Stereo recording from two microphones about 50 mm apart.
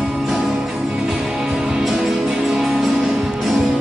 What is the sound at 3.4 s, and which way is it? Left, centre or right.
Music, centre.